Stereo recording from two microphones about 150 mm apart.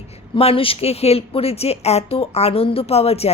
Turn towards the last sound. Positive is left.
turn(degrees=45)  # may be behind; listen again after turning